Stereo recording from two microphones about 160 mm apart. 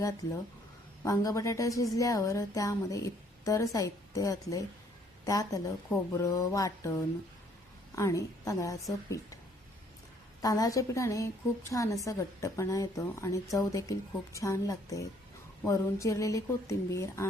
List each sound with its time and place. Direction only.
1.0 s speech: 20° left (ahead or behind)
7.9 s speech: 20° left (ahead or behind)
10.4 s speech: 20° left (ahead or behind)